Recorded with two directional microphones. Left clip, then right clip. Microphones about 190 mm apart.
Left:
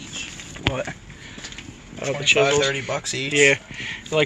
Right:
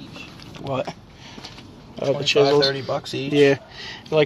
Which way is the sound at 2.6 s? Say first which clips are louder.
Right 1 dB; 25° right (ahead or behind).